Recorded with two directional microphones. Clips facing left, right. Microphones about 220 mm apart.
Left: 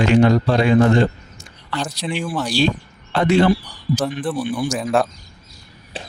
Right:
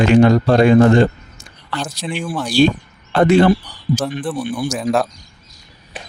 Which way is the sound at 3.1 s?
55° right (ahead or behind).